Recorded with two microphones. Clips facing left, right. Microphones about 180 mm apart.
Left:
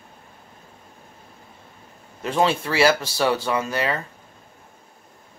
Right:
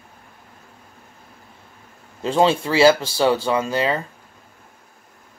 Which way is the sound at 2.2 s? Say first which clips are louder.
Right 4 dB; 25° right (ahead or behind).